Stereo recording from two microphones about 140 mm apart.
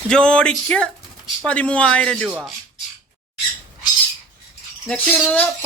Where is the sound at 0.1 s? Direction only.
5° left (ahead or behind).